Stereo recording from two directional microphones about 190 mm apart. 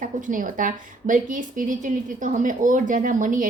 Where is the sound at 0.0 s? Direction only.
45° right (ahead or behind).